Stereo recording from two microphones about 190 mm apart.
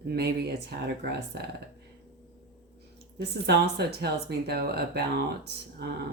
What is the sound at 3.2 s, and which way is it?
Speech, 60° right (ahead or behind).